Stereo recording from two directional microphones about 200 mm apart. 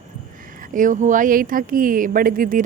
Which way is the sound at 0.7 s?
40° right (ahead or behind).